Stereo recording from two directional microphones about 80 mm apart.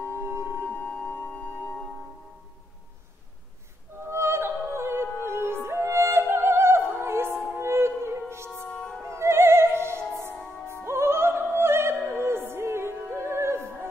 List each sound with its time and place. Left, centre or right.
0.1 s music: right
0.7 s music: centre
4.1 s music: right
8.6 s music: centre
9.0 s music: right
10.8 s opera: right